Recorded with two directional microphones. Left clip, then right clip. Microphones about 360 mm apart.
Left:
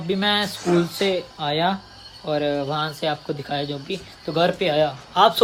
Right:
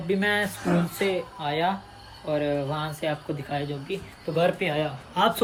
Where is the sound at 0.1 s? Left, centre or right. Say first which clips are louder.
Left 3 dB; centre.